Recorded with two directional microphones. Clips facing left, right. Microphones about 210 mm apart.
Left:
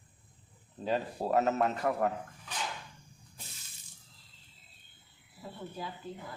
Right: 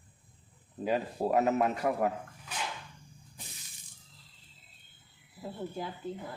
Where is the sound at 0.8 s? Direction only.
10° right (ahead or behind).